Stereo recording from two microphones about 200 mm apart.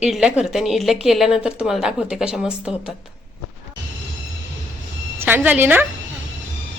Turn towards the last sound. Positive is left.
turn(degrees=-10)  # may be behind; listen again after turning